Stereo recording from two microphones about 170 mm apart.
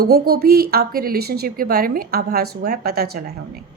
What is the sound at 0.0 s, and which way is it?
A woman's voice, 65° right (ahead or behind).